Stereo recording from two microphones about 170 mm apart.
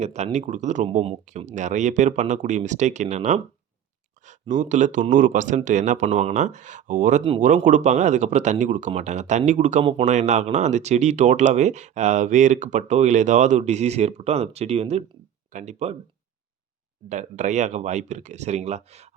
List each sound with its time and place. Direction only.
0.0 s speech: 40° right (ahead or behind)
7.2 s speech: 30° right (ahead or behind)
7.4 s speech: 45° right (ahead or behind)
17.1 s speech: 45° right (ahead or behind)